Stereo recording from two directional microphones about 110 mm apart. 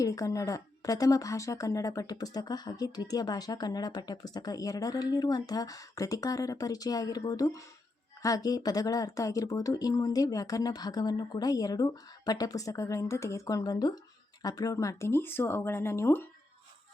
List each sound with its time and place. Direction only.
0.0 s a woman's voice: 30° left (ahead or behind)